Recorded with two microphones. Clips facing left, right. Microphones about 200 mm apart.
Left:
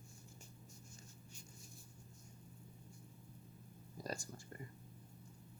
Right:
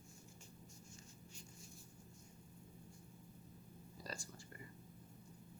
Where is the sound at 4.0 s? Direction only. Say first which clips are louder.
Left 6 dB; 45° left (ahead or behind).